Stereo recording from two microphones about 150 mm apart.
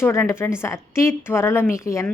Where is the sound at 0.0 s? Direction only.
20° left (ahead or behind).